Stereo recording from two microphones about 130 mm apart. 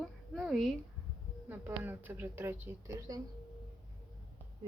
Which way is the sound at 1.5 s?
15° right (ahead or behind).